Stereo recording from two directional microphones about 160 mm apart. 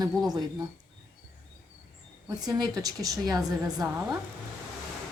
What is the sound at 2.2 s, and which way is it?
A woman's voice, 25° right (ahead or behind).